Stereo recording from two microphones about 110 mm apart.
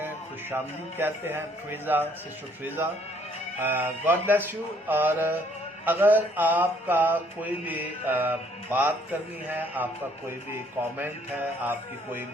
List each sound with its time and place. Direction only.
0.5 s speech: 20° right (ahead or behind)
3.6 s mantra: 20° right (ahead or behind)
10.9 s speech: 20° right (ahead or behind)